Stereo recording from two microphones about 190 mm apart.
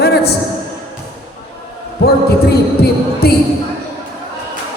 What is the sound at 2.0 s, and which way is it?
Speech, 55° left (ahead or behind).